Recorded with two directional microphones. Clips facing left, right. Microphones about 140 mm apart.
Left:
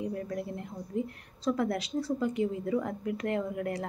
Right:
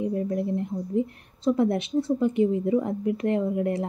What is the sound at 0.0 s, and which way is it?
A woman's voice, 25° right (ahead or behind).